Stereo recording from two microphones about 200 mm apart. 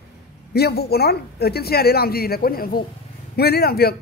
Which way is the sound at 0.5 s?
55° left (ahead or behind).